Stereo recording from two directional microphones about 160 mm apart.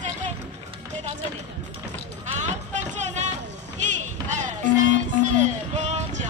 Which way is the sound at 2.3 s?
50° right (ahead or behind).